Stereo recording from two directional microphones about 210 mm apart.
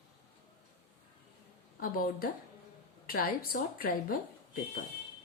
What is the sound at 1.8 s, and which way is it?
Speech, 40° left (ahead or behind).